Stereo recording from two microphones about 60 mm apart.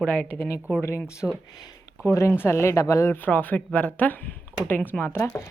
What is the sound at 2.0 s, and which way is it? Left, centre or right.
Speech, left.